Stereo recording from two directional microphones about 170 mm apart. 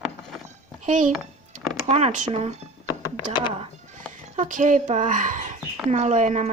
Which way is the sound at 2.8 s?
25° left (ahead or behind).